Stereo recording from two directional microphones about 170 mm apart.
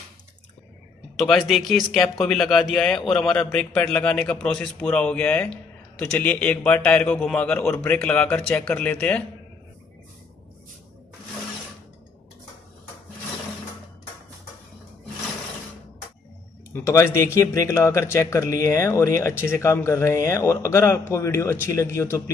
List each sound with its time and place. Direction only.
1.2 s a man's voice: centre (ahead or behind)
16.7 s a man's voice: 15° left (ahead or behind)